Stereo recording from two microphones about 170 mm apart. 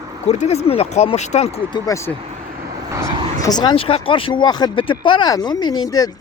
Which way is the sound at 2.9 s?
20° right (ahead or behind).